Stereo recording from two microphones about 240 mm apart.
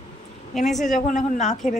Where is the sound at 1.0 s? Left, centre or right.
Left.